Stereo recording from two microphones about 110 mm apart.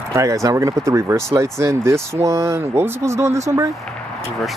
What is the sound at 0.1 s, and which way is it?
Speech, 30° right (ahead or behind).